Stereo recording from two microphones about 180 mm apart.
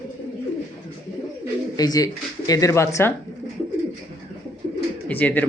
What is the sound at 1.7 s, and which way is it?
Speech, 20° left (ahead or behind).